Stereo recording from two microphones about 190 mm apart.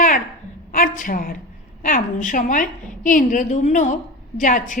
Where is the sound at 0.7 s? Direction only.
45° left (ahead or behind).